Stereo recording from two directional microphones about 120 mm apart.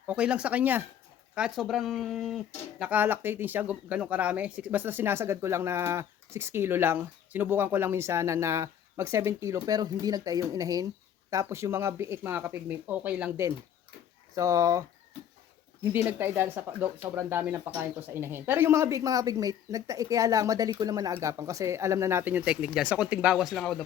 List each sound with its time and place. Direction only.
0.1 s speech: 10° right (ahead or behind)
14.3 s speech: 25° right (ahead or behind); by 23.8 s 5° left (ahead or behind)